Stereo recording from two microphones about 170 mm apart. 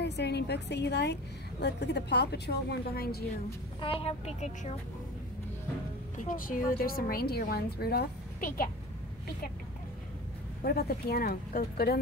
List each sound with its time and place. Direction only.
0.0 s a woman's voice: 80° left
3.8 s a woman's voice: 35° left (ahead or behind)
6.1 s a woman's voice: 50° left (ahead or behind)
10.6 s a woman's voice: 65° left (ahead or behind)